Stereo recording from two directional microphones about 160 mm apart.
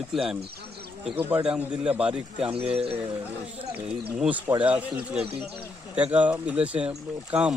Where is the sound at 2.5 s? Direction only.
40° right (ahead or behind).